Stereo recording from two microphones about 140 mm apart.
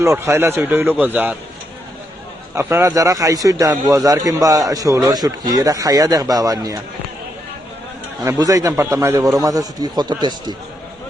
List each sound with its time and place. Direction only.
0.0 s a man's voice: 20° right (ahead or behind)
2.6 s a man's voice: 20° right (ahead or behind)
8.2 s a man's voice: 20° right (ahead or behind)